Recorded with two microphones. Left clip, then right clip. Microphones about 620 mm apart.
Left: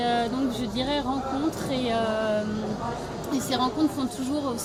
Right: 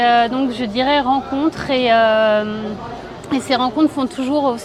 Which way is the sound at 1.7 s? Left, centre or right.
Right.